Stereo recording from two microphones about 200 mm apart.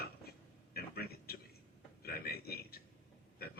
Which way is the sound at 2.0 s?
50° left (ahead or behind).